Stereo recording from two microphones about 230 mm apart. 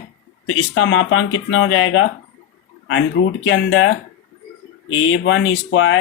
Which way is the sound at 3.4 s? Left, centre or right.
Left.